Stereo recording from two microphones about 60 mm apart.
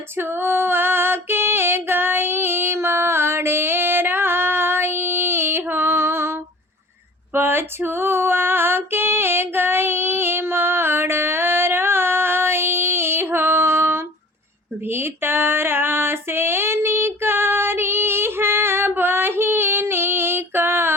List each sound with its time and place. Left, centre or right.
0.2 s female singing: right
7.3 s female singing: right